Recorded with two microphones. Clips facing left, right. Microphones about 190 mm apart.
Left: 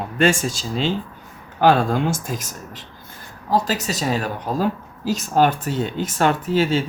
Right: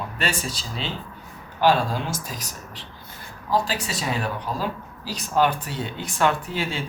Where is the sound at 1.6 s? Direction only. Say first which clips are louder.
Left 4 dB; 50° left (ahead or behind).